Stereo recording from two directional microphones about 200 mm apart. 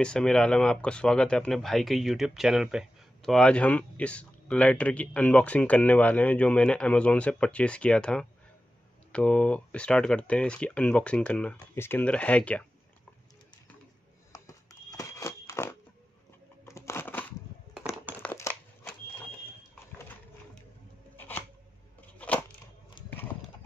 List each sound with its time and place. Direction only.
0.0 s speech: 5° left (ahead or behind)
14.3 s a sound: 20° left (ahead or behind)
16.6 s crumpling: 15° left (ahead or behind)
18.2 s crushing: 10° left (ahead or behind)
21.2 s shuffling cards: 10° left (ahead or behind)
22.0 s a sound: 5° left (ahead or behind)
23.0 s clip-clop: 10° left (ahead or behind)